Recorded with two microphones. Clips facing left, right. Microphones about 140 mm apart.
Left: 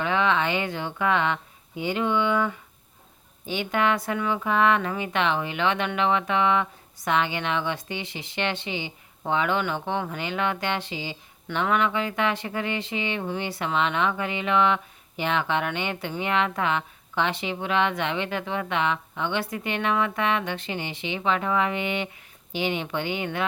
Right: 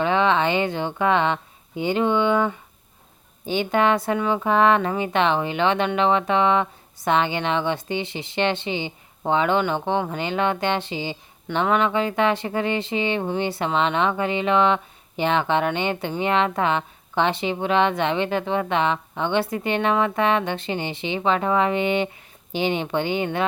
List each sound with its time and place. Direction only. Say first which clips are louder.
0.0 s a woman's voice: right 4 dB; 30° right (ahead or behind)